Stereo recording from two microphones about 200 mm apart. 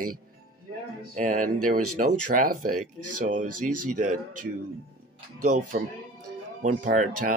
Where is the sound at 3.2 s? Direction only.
40° right (ahead or behind).